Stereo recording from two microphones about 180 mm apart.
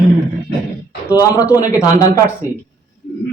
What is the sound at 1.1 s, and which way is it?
Speech, 20° left (ahead or behind).